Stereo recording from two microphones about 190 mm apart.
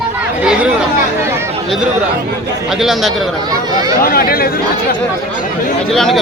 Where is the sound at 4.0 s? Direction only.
50° left (ahead or behind).